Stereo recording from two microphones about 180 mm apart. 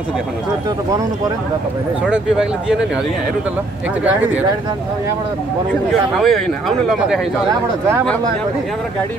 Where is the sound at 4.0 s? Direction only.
10° right (ahead or behind).